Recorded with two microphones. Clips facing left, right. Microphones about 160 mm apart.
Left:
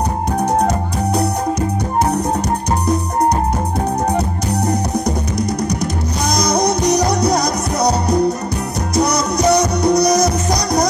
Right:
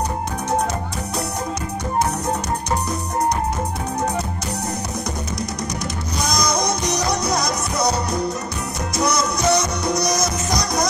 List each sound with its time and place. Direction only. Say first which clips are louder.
0.4 s music: left 6 dB; 35° left (ahead or behind)
4.6 s music: left 11 dB; 35° left (ahead or behind)
6.4 s music: left 8 dB; 35° left (ahead or behind)